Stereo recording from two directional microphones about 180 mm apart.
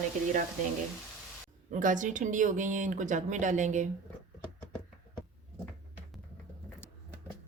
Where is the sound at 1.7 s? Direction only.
45° right (ahead or behind).